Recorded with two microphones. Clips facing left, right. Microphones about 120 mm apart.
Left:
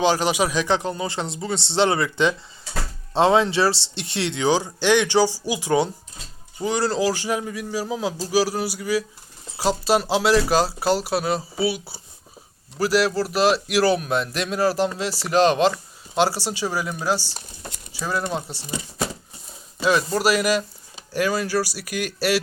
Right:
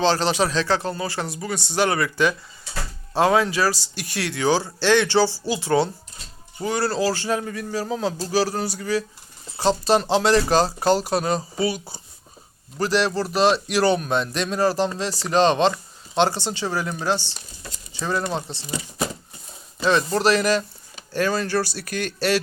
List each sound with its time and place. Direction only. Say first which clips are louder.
0.0 s a man's voice: even; 10° left (ahead or behind)
19.8 s a man's voice: right 1 dB; 5° left (ahead or behind)